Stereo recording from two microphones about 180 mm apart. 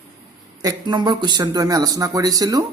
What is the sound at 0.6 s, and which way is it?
A man's voice, 20° right (ahead or behind).